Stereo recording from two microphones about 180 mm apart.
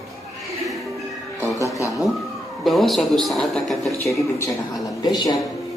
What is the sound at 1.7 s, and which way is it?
Speech, 20° left (ahead or behind).